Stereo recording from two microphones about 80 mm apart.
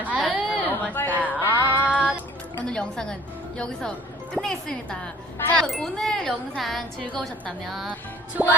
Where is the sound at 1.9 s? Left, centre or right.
Centre.